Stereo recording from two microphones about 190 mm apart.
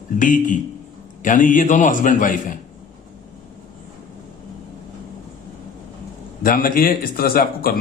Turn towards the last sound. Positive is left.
turn(degrees=50)  # may be behind; listen again after turning